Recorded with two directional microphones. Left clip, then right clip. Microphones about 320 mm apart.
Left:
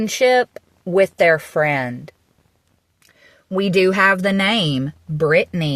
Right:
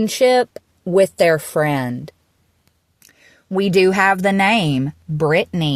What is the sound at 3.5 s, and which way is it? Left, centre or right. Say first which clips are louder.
Speech: right 1 dB; centre.